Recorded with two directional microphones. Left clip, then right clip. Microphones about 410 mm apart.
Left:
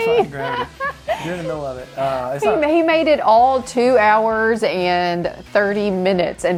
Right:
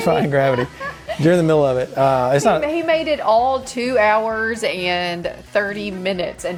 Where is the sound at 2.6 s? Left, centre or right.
Left.